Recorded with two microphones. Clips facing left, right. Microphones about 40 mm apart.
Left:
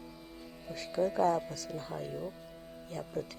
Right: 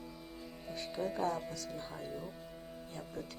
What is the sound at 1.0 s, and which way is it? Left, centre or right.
Speech, left.